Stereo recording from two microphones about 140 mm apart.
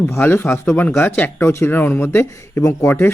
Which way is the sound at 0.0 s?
15° left (ahead or behind).